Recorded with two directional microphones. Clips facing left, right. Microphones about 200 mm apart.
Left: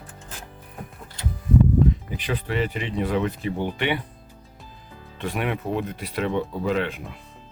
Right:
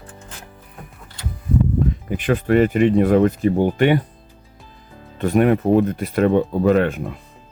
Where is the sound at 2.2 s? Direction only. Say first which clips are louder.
Right 13 dB; 50° right (ahead or behind).